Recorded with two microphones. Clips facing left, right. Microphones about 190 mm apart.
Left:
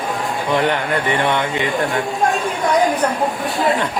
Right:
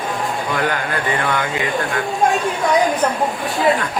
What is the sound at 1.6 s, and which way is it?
Speech, centre (ahead or behind).